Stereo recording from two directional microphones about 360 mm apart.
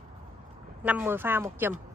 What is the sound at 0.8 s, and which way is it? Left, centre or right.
Speech, centre.